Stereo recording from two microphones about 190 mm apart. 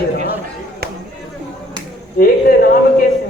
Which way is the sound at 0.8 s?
55° right (ahead or behind).